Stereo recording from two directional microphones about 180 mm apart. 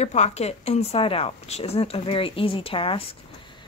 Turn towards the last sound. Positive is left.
turn(degrees=30)  # may be behind; listen again after turning